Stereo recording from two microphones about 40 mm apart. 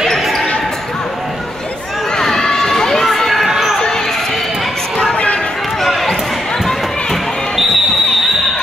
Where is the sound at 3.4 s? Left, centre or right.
Centre.